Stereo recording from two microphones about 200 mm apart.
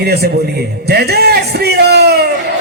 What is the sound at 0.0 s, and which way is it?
A man's voice, 50° right (ahead or behind).